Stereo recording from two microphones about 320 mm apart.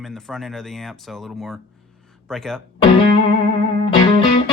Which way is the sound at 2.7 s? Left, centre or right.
Centre.